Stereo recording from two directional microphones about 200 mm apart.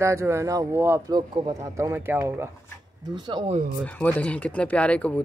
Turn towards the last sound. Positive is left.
turn(degrees=5)  # may be behind; listen again after turning